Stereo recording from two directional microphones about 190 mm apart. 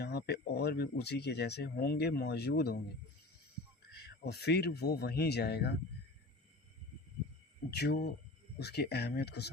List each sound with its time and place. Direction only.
0.0 s speech: 60° left (ahead or behind)
4.3 s speech: 60° left (ahead or behind)
7.8 s speech: 60° left (ahead or behind)